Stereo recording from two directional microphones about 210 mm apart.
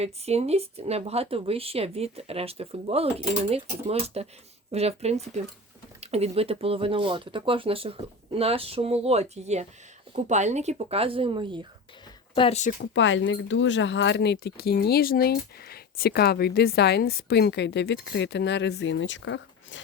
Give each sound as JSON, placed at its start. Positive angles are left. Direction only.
{"t": 0.0, "sound": "speech", "side_deg": -30}
{"t": 12.3, "sound": "speech", "side_deg": 25}
{"t": 12.9, "sound": "speech", "side_deg": 60}